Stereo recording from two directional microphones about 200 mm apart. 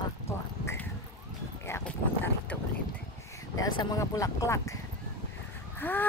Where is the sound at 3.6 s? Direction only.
20° left (ahead or behind).